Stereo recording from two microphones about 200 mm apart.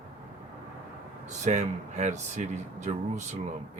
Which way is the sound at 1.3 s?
35° right (ahead or behind).